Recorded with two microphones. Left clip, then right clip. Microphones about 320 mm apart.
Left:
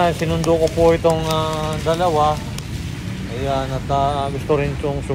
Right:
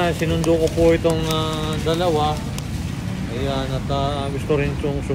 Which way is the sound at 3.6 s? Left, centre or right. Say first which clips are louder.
Left 4 dB; centre.